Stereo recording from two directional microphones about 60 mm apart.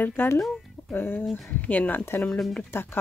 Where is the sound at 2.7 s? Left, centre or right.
Left.